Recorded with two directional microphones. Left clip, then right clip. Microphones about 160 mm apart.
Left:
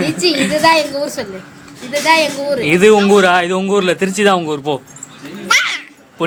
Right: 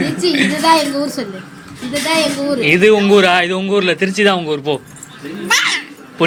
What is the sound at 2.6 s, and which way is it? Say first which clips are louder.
Speech: left 1 dB; 15° left (ahead or behind).